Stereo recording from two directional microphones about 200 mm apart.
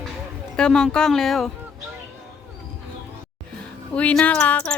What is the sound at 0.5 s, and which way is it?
Speech, 5° left (ahead or behind).